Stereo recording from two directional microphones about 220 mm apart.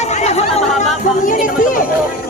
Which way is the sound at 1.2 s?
35° left (ahead or behind).